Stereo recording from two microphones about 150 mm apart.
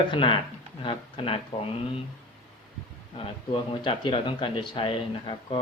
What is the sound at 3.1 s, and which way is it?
Speech, 35° left (ahead or behind).